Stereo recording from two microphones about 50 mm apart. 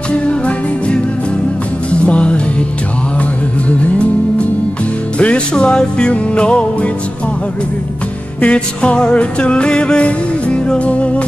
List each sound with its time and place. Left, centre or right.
0.1 s music: left
3.6 s music: left
8.4 s music: left